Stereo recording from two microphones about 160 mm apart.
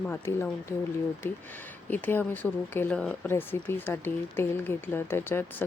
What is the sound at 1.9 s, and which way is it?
Speech, 10° left (ahead or behind).